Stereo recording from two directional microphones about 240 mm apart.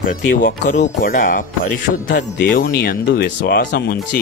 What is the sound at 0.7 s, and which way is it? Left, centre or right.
Speech, left.